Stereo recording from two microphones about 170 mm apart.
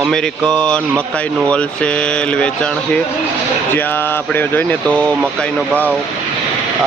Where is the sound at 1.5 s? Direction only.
5° left (ahead or behind).